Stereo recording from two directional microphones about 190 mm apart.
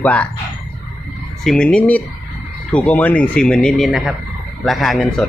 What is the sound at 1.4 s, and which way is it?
Speech, 5° left (ahead or behind).